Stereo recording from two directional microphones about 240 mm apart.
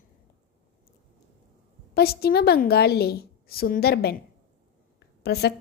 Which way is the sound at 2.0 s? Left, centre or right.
Left.